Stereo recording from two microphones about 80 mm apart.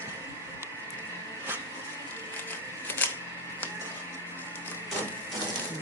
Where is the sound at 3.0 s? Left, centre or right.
Left.